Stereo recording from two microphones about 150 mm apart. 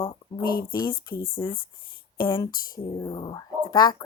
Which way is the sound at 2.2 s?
35° left (ahead or behind).